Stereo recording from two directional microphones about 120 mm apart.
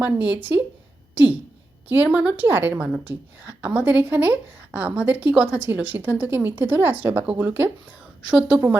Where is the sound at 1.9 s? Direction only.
10° right (ahead or behind).